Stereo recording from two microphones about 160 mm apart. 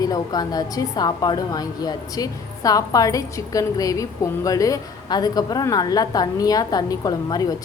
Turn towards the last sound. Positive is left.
turn(degrees=25)  # may be behind; listen again after turning